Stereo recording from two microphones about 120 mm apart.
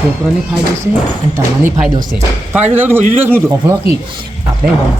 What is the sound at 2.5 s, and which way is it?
Speech, 15° right (ahead or behind).